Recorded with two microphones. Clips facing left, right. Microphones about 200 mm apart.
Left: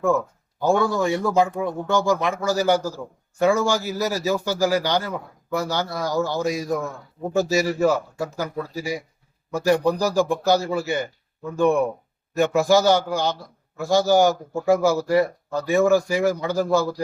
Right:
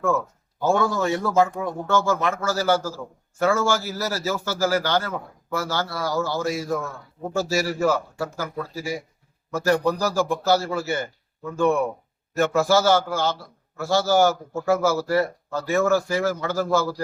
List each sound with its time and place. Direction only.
0.6 s speech: 15° left (ahead or behind)